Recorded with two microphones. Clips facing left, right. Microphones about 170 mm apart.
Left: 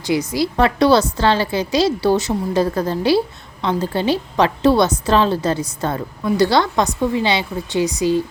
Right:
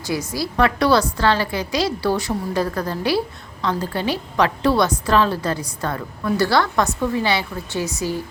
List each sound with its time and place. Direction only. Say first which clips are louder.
0.1 s a woman's voice: left 6 dB; 20° left (ahead or behind)